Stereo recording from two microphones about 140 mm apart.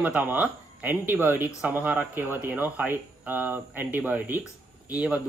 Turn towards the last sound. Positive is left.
turn(degrees=-10)  # may be behind; listen again after turning